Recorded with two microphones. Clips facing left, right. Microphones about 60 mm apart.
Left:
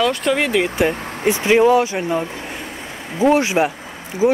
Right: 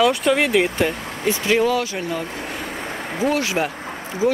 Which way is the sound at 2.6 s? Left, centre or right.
Right.